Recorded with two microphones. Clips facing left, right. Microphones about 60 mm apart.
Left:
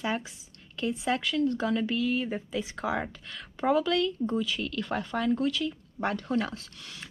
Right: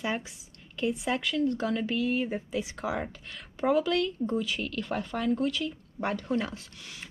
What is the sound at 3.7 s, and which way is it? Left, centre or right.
Speech, right.